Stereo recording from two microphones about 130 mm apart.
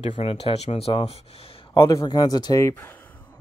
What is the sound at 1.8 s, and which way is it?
Speech, 25° left (ahead or behind).